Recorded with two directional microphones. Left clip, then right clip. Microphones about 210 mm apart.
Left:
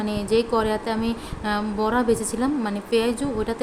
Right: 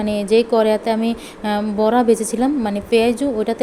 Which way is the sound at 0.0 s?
20° right (ahead or behind).